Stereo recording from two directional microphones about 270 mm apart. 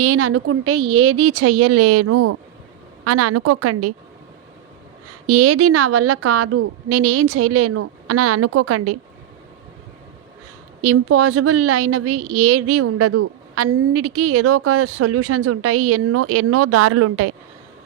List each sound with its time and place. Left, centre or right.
0.0 s a woman's voice: right
5.2 s a woman's voice: right
10.8 s a woman's voice: right